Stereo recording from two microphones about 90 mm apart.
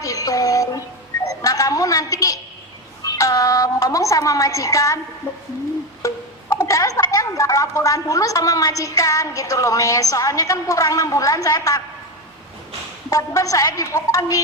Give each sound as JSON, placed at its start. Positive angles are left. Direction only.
{"t": 0.0, "sound": "music", "side_deg": 40}
{"t": 1.3, "sound": "a sound", "side_deg": 40}
{"t": 3.0, "sound": "a woman's voice", "side_deg": 40}
{"t": 6.0, "sound": "music", "side_deg": 35}
{"t": 6.5, "sound": "a woman's voice", "side_deg": 35}
{"t": 13.1, "sound": "a woman's voice", "side_deg": 40}